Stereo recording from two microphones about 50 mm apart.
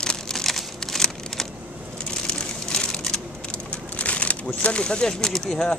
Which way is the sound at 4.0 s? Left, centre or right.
Left.